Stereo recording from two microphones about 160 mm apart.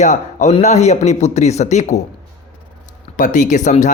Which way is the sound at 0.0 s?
50° left (ahead or behind).